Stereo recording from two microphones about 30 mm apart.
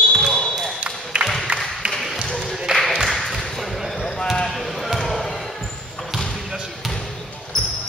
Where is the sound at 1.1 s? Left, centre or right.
Right.